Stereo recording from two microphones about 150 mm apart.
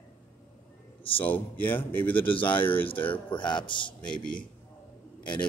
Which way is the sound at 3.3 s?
30° left (ahead or behind).